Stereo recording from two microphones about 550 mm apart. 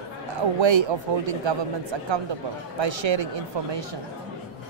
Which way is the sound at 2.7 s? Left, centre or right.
Right.